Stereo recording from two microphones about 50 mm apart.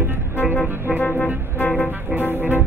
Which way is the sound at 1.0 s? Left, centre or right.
Left.